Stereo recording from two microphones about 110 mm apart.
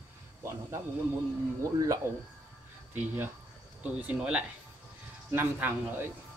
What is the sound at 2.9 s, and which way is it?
Speech, 20° right (ahead or behind).